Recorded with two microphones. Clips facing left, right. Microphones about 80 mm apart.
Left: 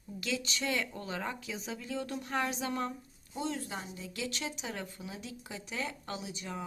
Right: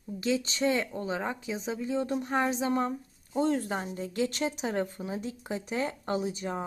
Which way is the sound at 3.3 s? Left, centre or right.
Right.